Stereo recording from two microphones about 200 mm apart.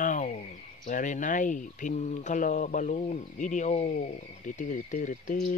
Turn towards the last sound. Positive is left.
turn(degrees=40)  # may be behind; listen again after turning